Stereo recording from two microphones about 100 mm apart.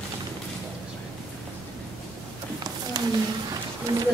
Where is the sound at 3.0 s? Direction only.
45° right (ahead or behind).